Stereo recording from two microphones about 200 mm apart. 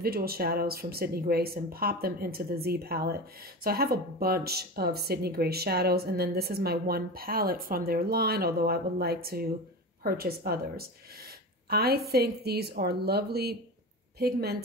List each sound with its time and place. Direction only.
0.0 s speech: 50° right (ahead or behind)